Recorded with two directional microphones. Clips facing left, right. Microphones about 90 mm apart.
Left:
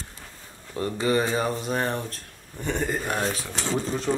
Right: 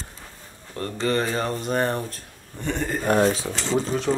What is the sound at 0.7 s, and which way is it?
Speech, 10° left (ahead or behind).